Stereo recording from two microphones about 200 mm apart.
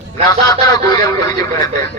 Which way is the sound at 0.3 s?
20° left (ahead or behind).